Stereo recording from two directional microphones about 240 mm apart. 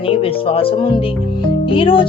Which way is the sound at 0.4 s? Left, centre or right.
Left.